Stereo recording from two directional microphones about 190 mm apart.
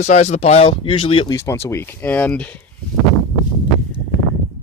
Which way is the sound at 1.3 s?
15° left (ahead or behind).